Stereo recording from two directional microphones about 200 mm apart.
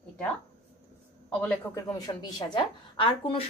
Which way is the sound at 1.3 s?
5° left (ahead or behind).